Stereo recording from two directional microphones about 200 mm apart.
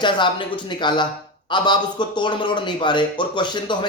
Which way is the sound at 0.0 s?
25° left (ahead or behind).